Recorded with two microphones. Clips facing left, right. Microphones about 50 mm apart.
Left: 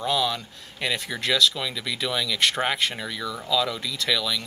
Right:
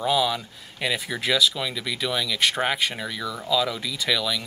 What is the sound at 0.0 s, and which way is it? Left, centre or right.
Speech, centre.